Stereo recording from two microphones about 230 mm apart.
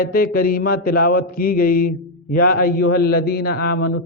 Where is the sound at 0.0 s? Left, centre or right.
Left.